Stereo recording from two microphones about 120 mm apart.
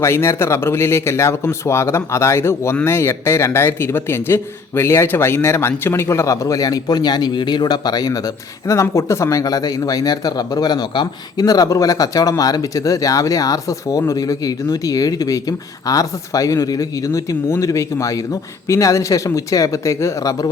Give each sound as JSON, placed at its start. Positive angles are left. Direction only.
{"t": 0.0, "sound": "speech", "side_deg": 20}